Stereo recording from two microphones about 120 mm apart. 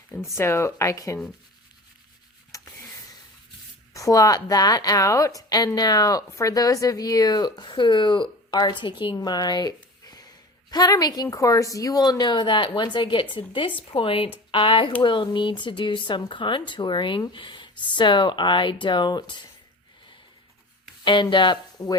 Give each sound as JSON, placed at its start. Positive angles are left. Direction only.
{"t": 0.1, "sound": "speech", "side_deg": 0}
{"t": 0.3, "sound": "speech", "side_deg": 20}
{"t": 2.5, "sound": "a sound", "side_deg": 30}
{"t": 3.9, "sound": "a woman's voice", "side_deg": 30}
{"t": 21.0, "sound": "a woman's voice", "side_deg": 40}